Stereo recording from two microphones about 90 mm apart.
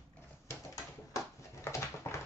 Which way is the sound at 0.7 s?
40° left (ahead or behind).